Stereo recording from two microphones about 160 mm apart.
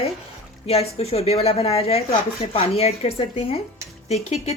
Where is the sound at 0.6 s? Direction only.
40° left (ahead or behind).